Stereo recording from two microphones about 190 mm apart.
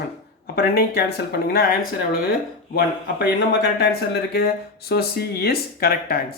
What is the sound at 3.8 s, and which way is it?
Speech, 55° left (ahead or behind).